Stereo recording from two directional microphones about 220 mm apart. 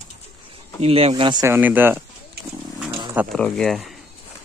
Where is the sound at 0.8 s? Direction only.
30° right (ahead or behind); by 2.0 s 10° right (ahead or behind).